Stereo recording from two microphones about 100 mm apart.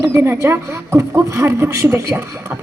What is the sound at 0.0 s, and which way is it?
A woman's voice, 25° right (ahead or behind).